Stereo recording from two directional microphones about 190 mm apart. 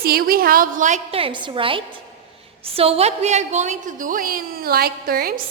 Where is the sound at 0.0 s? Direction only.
55° right (ahead or behind).